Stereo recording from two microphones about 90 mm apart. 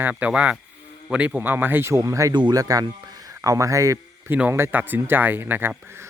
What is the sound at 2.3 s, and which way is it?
Speech, 60° right (ahead or behind).